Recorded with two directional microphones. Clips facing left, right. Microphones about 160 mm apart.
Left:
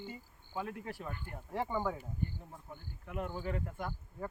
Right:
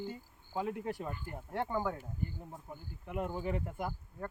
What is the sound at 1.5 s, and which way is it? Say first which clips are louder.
Speech: even; centre (ahead or behind).